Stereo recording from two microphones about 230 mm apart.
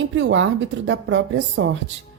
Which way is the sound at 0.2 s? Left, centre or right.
Right.